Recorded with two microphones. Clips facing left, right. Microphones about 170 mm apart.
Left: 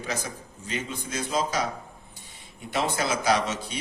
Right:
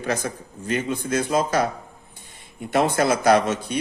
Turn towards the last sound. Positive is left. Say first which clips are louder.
# right 7 dB
turn(degrees=-55)  # may be behind; listen again after turning